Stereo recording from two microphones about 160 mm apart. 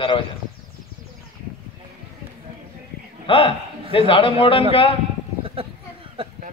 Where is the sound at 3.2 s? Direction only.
35° left (ahead or behind).